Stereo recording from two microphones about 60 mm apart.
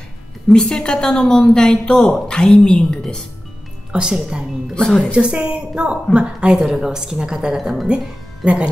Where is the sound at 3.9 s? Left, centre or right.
Centre.